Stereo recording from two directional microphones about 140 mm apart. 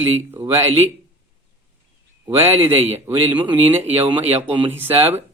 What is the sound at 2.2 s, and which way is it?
Speech, 15° right (ahead or behind).